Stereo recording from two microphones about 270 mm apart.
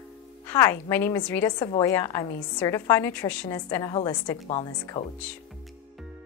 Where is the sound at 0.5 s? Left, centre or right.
Centre.